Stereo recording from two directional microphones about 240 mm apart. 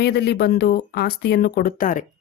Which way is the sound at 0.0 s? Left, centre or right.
Left.